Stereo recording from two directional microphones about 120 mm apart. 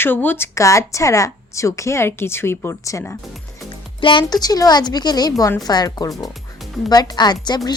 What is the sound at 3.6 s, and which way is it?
A woman's voice, 45° left (ahead or behind).